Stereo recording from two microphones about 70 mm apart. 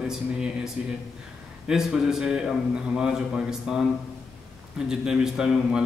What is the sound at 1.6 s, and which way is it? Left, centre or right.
A man's voice, centre.